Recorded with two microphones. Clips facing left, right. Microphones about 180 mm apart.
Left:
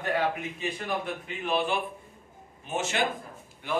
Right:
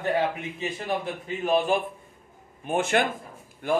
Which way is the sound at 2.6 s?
55° right (ahead or behind).